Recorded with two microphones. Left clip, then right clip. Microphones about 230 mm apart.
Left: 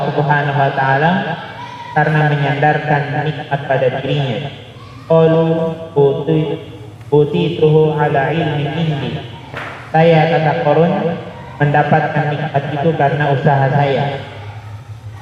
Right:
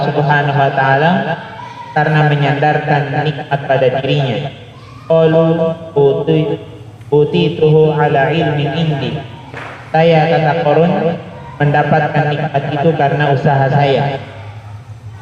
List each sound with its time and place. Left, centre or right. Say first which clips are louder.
0.0 s a man's voice: right 2 dB; right